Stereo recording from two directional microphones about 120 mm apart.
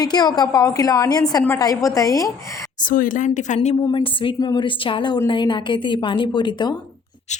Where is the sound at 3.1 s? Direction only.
90° left.